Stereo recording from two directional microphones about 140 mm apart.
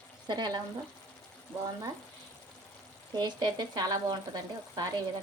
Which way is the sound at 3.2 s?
30° right (ahead or behind).